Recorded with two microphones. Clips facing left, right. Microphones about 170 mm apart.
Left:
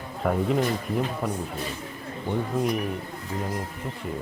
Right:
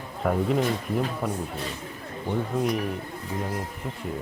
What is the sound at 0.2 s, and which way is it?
Speech, centre (ahead or behind).